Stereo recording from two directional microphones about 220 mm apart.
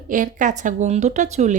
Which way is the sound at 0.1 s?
35° right (ahead or behind).